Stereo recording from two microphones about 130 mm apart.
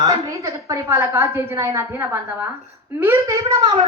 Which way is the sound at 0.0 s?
25° right (ahead or behind).